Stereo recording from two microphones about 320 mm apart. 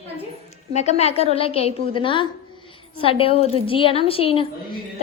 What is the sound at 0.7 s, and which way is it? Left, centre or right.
A woman's voice, centre.